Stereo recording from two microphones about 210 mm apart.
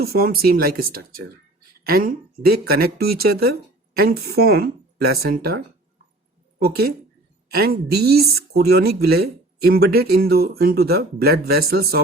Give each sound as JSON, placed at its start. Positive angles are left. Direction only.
{"t": 0.0, "sound": "speech", "side_deg": -45}